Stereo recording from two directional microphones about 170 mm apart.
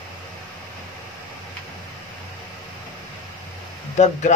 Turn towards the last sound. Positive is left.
turn(degrees=45)  # may be behind; listen again after turning